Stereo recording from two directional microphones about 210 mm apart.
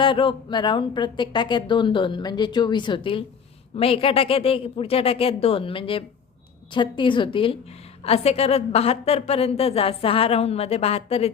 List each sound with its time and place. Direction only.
0.0 s speech: 25° left (ahead or behind)